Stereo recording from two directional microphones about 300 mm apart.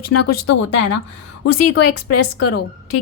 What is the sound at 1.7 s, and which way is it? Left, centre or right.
Speech, left.